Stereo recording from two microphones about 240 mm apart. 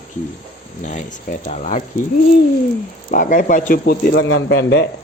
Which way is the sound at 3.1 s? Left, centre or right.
Left.